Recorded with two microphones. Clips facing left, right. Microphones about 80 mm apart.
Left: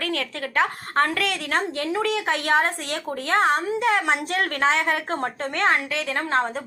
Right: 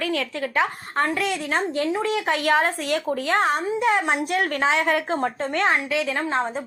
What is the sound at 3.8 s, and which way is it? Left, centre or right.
A woman's voice, left.